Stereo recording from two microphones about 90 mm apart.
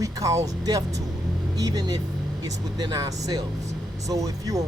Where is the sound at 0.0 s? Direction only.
40° right (ahead or behind).